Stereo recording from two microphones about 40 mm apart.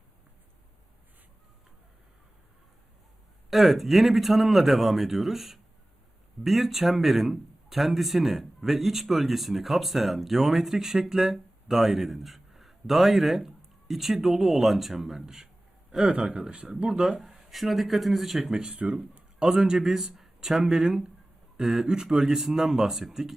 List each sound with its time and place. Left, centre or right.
3.5 s speech: centre; by 17.1 s right
17.1 s speech: centre
18.5 s speech: centre
18.8 s speech: right
19.5 s speech: centre